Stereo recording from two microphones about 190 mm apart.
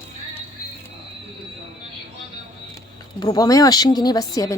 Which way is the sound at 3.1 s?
20° left (ahead or behind).